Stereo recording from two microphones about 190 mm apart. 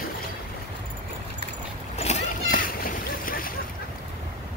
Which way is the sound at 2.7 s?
50° left (ahead or behind).